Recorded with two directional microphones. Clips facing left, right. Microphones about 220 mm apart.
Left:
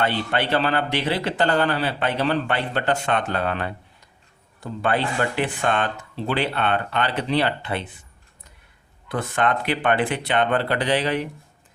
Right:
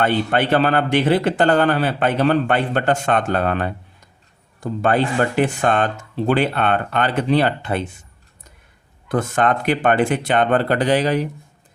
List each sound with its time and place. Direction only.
0.0 s a man's voice: 50° right (ahead or behind)
9.0 s a man's voice: 45° right (ahead or behind)